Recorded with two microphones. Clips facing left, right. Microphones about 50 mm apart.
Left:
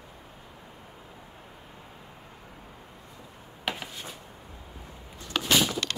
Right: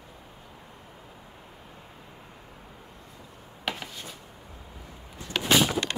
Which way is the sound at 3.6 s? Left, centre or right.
Centre.